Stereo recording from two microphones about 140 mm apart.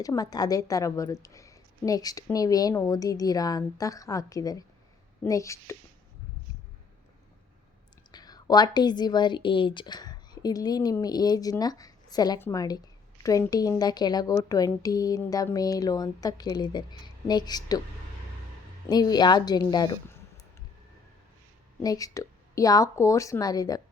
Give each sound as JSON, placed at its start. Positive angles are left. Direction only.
{"t": 0.0, "sound": "a woman's voice", "side_deg": 25}
{"t": 8.1, "sound": "a woman's voice", "side_deg": 30}
{"t": 18.9, "sound": "a woman's voice", "side_deg": 30}
{"t": 21.8, "sound": "a woman's voice", "side_deg": 25}